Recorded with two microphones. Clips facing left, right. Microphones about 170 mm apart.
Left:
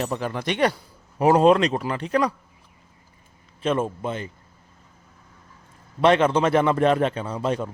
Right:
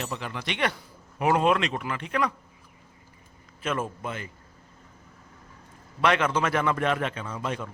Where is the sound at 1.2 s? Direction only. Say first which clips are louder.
Left 7 dB; 35° left (ahead or behind).